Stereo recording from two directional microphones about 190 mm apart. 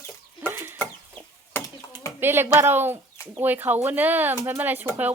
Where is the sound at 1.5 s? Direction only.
15° left (ahead or behind).